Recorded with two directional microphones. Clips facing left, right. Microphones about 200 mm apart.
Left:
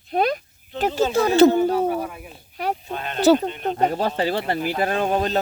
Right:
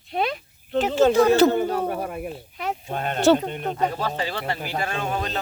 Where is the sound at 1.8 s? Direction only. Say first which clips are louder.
Left 3 dB; 50° right (ahead or behind).